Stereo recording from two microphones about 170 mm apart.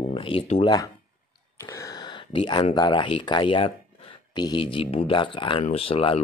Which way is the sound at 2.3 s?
30° left (ahead or behind).